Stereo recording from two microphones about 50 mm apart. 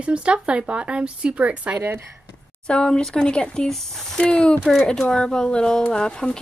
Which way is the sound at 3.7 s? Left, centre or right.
Centre.